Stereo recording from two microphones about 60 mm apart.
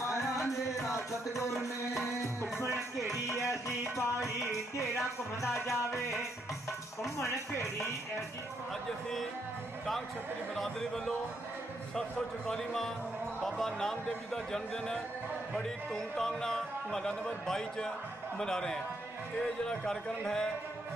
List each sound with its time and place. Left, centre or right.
0.5 s music: left
3.3 s music: left
5.7 s speech: left
10.5 s speech: centre